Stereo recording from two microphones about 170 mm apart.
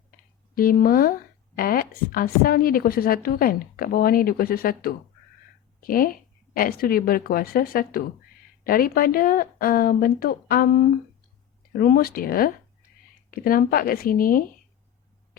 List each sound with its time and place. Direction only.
0.5 s a woman's voice: 60° left (ahead or behind)